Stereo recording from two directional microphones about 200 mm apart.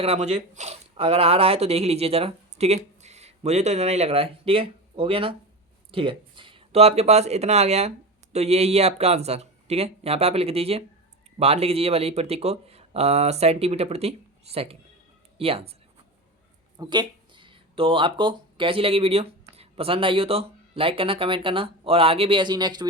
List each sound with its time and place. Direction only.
0.0 s speech: 30° right (ahead or behind)
16.7 s speech: 20° right (ahead or behind)